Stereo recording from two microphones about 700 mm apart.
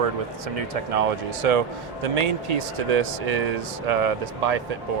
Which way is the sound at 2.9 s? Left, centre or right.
Right.